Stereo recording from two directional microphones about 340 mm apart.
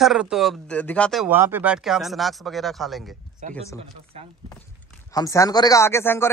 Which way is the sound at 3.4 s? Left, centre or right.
Right.